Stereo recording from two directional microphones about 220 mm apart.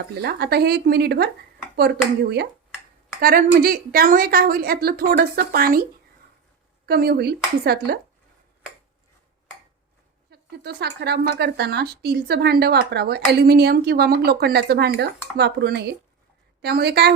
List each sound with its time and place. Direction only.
0.2 s speech: 45° right (ahead or behind)
3.2 s a woman's voice: 40° right (ahead or behind)
6.8 s speech: 45° right (ahead or behind)
10.2 s speech: 45° right (ahead or behind)